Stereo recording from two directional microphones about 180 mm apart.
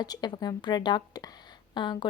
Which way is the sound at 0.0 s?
20° left (ahead or behind).